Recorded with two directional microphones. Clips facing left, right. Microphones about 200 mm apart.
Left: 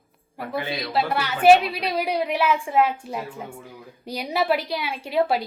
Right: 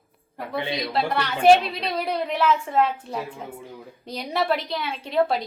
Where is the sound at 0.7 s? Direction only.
5° left (ahead or behind).